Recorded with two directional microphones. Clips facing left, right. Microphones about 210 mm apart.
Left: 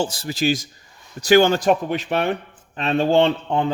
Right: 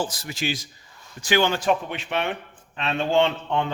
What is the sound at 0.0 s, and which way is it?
Speech, 30° left (ahead or behind).